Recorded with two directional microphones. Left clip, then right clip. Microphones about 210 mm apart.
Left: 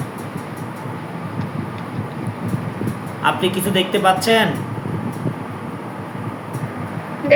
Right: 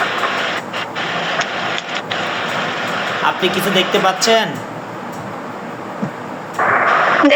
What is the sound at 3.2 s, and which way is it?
A man's voice, 15° left (ahead or behind).